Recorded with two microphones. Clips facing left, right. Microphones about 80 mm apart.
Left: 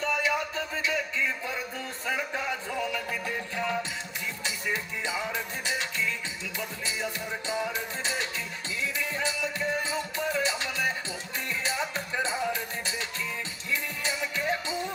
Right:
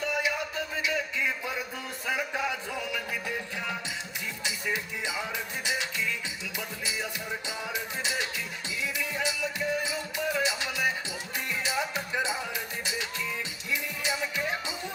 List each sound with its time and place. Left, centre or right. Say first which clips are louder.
0.0 s music: left 2 dB; left